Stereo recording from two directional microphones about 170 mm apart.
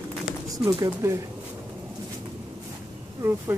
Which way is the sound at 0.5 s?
20° right (ahead or behind).